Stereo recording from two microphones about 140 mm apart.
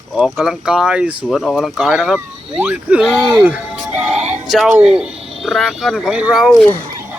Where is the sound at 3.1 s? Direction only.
15° right (ahead or behind).